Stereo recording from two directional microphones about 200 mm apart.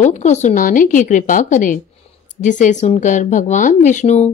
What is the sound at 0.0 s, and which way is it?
Speech, 35° left (ahead or behind).